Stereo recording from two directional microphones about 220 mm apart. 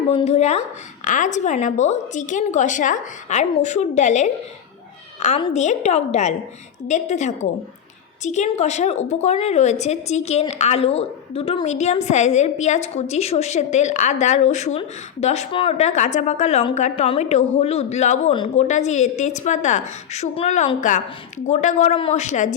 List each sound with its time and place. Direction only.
0.1 s a woman's voice: 30° left (ahead or behind)